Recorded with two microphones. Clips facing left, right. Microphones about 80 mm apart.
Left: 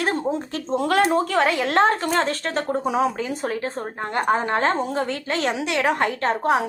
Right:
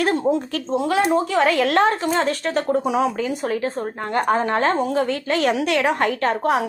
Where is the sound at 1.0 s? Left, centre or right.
Left.